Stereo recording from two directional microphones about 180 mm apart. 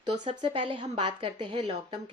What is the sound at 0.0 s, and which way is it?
Speech, 30° right (ahead or behind).